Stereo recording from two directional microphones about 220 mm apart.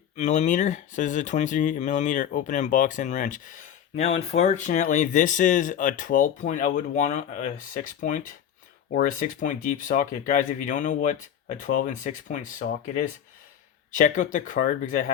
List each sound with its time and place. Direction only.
0.2 s speech: 35° left (ahead or behind)